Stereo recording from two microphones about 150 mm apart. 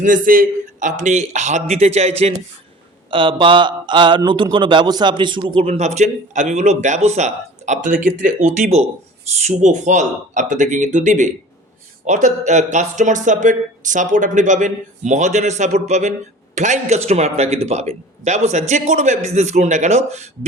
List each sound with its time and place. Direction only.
0.0 s speech: 65° right (ahead or behind); by 2.3 s 45° right (ahead or behind)
3.1 s a man's voice: 35° right (ahead or behind); by 8.7 s 65° right (ahead or behind)
9.3 s speech: 50° right (ahead or behind)